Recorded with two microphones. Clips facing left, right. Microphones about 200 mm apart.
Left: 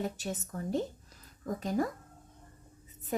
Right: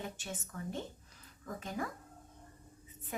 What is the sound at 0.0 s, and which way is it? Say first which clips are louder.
A woman's voice: left 8 dB; 40° left (ahead or behind).